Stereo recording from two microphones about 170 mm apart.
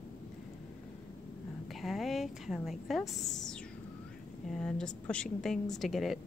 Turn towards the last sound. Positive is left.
turn(degrees=0)  # may be behind; listen again after turning